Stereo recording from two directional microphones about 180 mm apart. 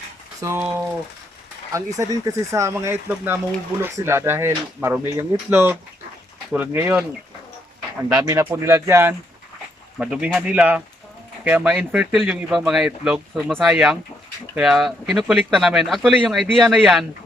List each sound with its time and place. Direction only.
0.4 s speech: 15° right (ahead or behind)
2.0 s speech: 15° right (ahead or behind)
8.1 s speech: 15° right (ahead or behind); by 17.1 s centre (ahead or behind)